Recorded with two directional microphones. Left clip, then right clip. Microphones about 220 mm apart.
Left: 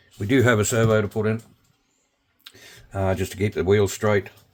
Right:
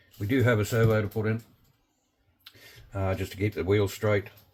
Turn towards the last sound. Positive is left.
turn(degrees=50)  # may be behind; listen again after turning